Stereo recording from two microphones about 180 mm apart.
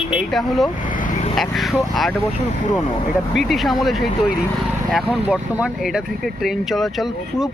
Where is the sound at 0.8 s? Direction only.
45° left (ahead or behind).